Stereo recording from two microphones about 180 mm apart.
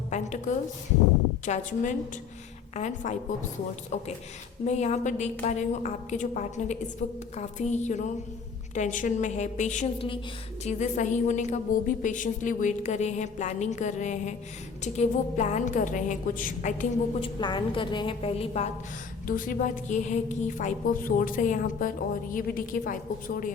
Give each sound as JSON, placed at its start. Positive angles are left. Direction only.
{"t": 0.1, "sound": "a sound", "side_deg": 40}
{"t": 1.5, "sound": "a woman's voice", "side_deg": 40}
{"t": 4.6, "sound": "a woman's voice", "side_deg": 40}
{"t": 17.2, "sound": "a woman's voice", "side_deg": 25}
{"t": 19.3, "sound": "a woman's voice", "side_deg": 50}